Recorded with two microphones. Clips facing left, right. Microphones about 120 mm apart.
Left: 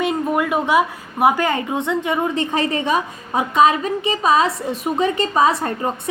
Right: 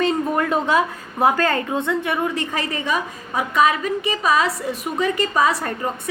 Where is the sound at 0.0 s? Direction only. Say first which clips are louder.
Even; 10° left (ahead or behind).